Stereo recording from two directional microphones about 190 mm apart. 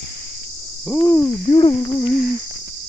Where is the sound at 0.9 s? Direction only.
15° left (ahead or behind).